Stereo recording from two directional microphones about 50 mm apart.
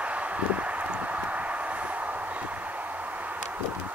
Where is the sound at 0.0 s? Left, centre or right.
Right.